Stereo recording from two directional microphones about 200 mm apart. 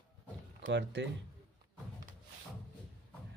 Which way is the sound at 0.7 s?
60° right (ahead or behind).